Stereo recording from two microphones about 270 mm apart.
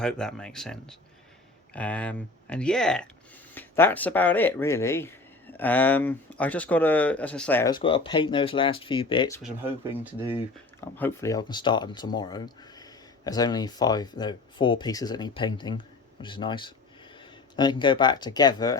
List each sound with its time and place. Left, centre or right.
0.0 s speech: centre
10.8 s speech: centre